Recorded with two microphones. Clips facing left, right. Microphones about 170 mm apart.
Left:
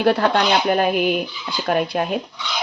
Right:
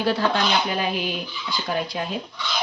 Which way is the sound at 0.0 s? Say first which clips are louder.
Left 5 dB; 60° left (ahead or behind).